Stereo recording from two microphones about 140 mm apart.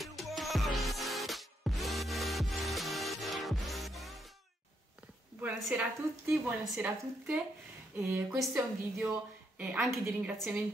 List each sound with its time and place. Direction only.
0.0 s music: centre (ahead or behind)
5.4 s speech: 5° right (ahead or behind)
7.9 s a woman's voice: 20° right (ahead or behind); by 10.5 s centre (ahead or behind)